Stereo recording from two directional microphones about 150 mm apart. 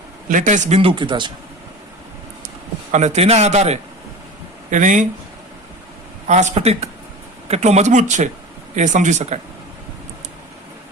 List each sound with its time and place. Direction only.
0.3 s a man's voice: 60° right (ahead or behind)
0.8 s speech: 35° right (ahead or behind)
2.9 s a man's voice: 50° right (ahead or behind)
4.7 s a man's voice: 60° right (ahead or behind)
6.2 s a man's voice: 50° right (ahead or behind)